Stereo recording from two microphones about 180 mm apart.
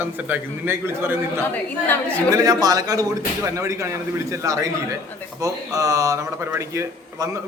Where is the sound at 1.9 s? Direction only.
10° left (ahead or behind).